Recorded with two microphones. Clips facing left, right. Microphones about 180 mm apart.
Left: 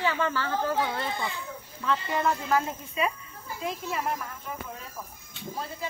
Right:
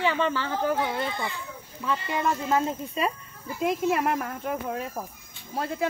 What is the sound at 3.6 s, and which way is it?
Speech, 65° right (ahead or behind).